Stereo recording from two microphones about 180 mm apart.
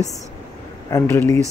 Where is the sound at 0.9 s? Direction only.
15° left (ahead or behind).